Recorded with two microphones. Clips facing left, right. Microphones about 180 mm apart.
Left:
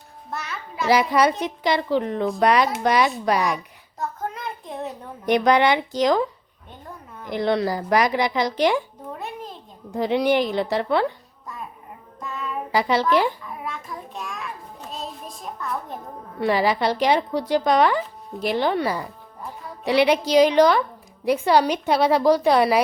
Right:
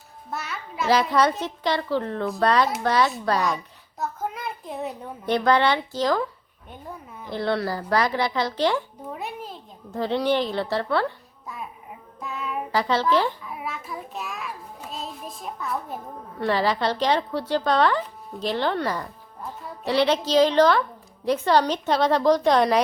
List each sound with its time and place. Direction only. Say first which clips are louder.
0.3 s a child's voice: even; centre (ahead or behind)
1.4 s speech: left 3 dB; 15° left (ahead or behind)
3.9 s a child's voice: even; 5° right (ahead or behind)
5.2 s speech: left 3 dB; 15° left (ahead or behind)
6.7 s a sound: right 2 dB; 10° right (ahead or behind)
7.3 s speech: left 3 dB; 15° left (ahead or behind)
9.1 s a sound: even; 5° right (ahead or behind)
9.9 s speech: left 3 dB; 15° left (ahead or behind)
11.4 s babbling: even; 5° right (ahead or behind)
12.2 s child singing: even; 5° right (ahead or behind)
12.7 s speech: left 2 dB; 15° left (ahead or behind)
13.4 s child singing: even; 5° right (ahead or behind)
16.4 s speech: left 2 dB; 10° left (ahead or behind)